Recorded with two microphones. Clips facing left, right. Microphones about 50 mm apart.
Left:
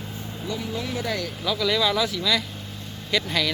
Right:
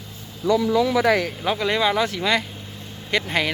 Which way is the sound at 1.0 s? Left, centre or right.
Right.